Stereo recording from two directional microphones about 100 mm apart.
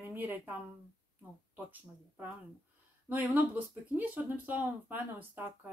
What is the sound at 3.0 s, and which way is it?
Speech, 15° right (ahead or behind).